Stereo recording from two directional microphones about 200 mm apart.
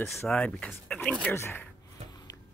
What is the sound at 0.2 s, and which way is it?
Speech, 5° left (ahead or behind).